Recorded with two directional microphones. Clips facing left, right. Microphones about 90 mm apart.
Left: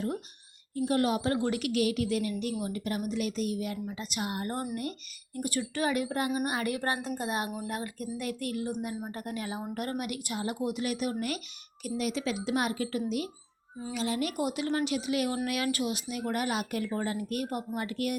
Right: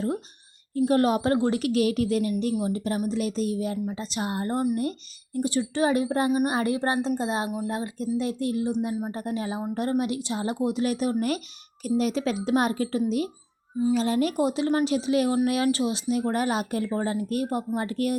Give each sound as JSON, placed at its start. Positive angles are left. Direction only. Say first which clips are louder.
{"t": 0.8, "sound": "a woman's voice", "louder": "right 6 dB", "side_deg": -40}